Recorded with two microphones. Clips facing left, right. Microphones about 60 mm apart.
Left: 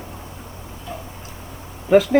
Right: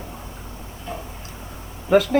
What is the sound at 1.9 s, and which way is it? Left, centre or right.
Speech, centre.